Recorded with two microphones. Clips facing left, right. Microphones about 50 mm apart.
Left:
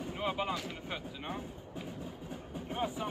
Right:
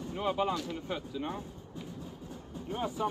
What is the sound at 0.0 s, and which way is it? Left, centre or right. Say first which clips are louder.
Speech: right 4 dB; left.